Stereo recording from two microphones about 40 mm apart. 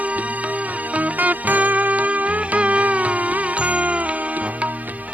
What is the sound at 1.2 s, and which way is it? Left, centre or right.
Music, right.